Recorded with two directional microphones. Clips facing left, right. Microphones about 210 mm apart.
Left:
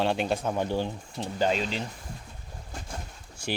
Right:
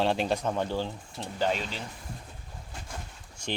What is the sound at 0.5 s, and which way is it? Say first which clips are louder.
Speech: left 2 dB; 15° left (ahead or behind).